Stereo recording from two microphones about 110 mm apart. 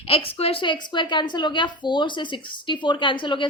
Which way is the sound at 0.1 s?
60° left (ahead or behind).